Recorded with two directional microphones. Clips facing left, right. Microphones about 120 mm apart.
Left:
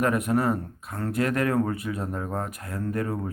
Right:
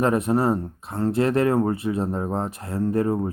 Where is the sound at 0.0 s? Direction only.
30° right (ahead or behind).